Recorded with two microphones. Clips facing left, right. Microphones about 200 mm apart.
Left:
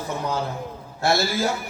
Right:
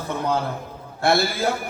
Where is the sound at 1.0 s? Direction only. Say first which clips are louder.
Right 1 dB; 55° right (ahead or behind).